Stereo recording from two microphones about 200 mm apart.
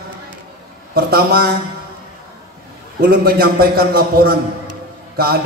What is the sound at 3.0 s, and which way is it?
A man's voice, 50° right (ahead or behind).